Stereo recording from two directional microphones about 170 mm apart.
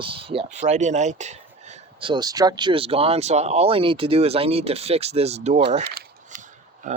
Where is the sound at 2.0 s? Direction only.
25° right (ahead or behind).